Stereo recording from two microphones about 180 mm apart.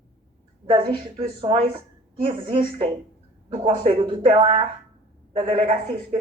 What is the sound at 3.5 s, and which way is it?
Speech, 25° right (ahead or behind).